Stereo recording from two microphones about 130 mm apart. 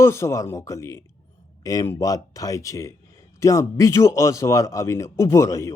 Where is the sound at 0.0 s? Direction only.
20° left (ahead or behind).